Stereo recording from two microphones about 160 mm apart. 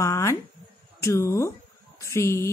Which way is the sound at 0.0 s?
20° left (ahead or behind).